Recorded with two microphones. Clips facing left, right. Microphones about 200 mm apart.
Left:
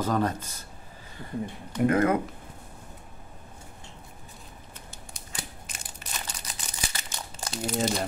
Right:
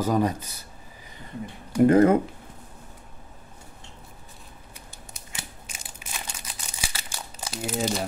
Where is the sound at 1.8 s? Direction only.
30° right (ahead or behind).